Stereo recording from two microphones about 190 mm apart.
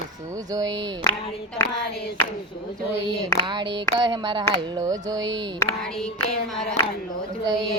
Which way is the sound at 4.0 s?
25° right (ahead or behind).